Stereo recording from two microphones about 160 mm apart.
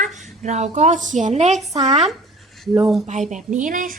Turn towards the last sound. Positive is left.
turn(degrees=-55)  # may be behind; listen again after turning